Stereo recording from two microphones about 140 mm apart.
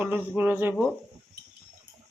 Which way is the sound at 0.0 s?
15° right (ahead or behind).